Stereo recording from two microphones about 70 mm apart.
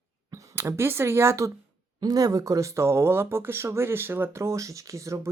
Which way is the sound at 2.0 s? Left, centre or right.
Right.